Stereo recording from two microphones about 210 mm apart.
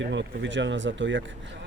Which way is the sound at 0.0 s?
60° right (ahead or behind).